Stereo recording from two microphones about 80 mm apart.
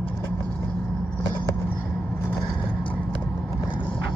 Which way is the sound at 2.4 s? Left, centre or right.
Left.